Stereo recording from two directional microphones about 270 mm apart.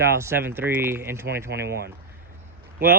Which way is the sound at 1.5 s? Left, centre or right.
Right.